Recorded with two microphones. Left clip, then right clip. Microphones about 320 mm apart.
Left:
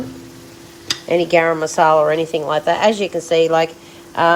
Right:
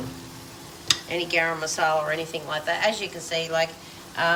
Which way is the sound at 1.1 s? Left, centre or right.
Centre.